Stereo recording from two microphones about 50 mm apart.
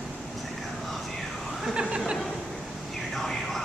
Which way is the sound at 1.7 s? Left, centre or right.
Centre.